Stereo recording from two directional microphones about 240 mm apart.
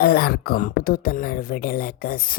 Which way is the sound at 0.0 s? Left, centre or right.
Left.